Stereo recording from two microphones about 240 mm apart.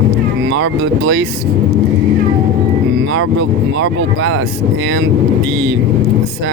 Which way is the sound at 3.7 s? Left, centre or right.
Right.